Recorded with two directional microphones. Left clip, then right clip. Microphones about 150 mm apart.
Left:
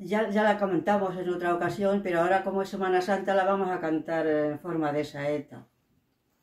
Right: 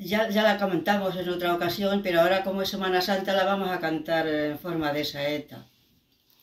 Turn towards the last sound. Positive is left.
turn(degrees=5)  # may be behind; listen again after turning